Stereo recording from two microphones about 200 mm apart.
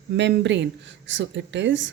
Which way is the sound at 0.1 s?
60° right (ahead or behind).